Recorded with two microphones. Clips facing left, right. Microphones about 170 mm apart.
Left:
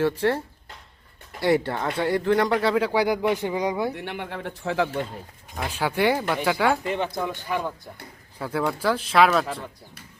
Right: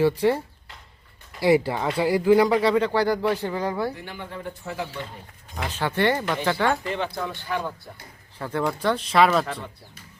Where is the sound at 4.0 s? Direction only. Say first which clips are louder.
Left 4 dB; 70° left (ahead or behind); by 4.9 s 90° left.